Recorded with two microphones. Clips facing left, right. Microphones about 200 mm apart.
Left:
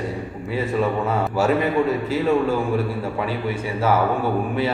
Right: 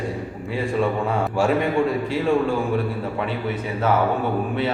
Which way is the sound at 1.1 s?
5° left (ahead or behind).